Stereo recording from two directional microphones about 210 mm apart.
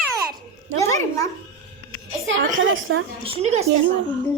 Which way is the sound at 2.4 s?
65° right (ahead or behind).